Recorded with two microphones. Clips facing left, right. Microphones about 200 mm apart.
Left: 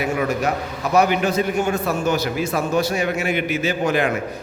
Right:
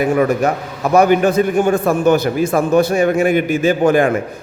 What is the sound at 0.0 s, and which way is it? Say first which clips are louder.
A man's voice: right 7 dB; 50° right (ahead or behind).